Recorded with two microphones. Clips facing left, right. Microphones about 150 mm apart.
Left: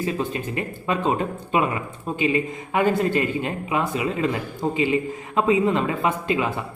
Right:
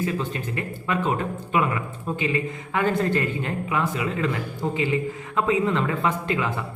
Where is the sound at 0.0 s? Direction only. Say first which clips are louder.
Left 1 dB; 20° left (ahead or behind).